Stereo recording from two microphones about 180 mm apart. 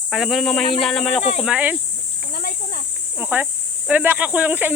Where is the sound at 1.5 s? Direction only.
10° right (ahead or behind).